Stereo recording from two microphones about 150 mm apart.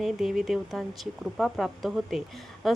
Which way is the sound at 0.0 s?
Centre (ahead or behind).